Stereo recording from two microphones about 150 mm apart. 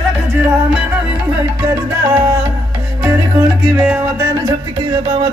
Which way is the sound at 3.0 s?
15° right (ahead or behind).